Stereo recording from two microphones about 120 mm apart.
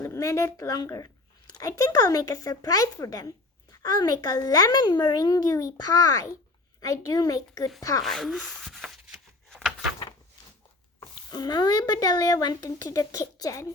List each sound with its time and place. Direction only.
0.0 s a woman's voice: 25° left (ahead or behind)
8.0 s speech: centre (ahead or behind)
9.5 s a sound: 5° left (ahead or behind)
11.3 s speech: 35° left (ahead or behind)